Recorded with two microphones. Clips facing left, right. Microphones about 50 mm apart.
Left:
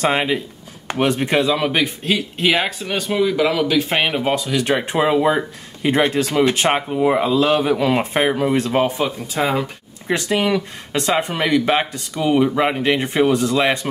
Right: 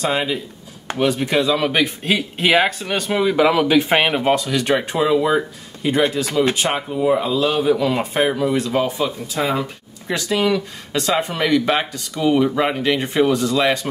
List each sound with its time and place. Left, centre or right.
0.0 s speech: left
1.5 s speech: centre
3.2 s speech: centre
4.8 s speech: left
6.2 s speech: left
7.2 s speech: left
9.4 s speech: centre
10.0 s speech: left; by 12.4 s centre
12.8 s speech: left